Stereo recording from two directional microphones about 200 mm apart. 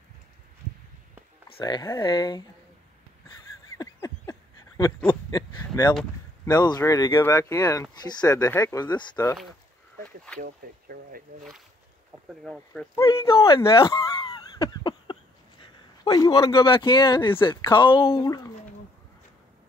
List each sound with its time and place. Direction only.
1.6 s speech: 20° left (ahead or behind)
3.7 s a sound: 20° left (ahead or behind)
6.4 s speech: 20° left (ahead or behind)
10.4 s speech: 45° right (ahead or behind)
12.3 s speech: centre (ahead or behind)
13.1 s speech: 25° left (ahead or behind)
13.7 s a sound: 25° left (ahead or behind)
15.6 s a man's voice: 20° left (ahead or behind)